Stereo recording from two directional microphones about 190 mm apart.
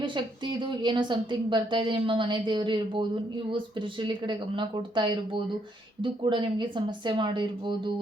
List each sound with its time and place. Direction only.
0.0 s a woman's voice: 25° right (ahead or behind)